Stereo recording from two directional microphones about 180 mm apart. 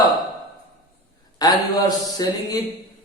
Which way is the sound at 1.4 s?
20° left (ahead or behind).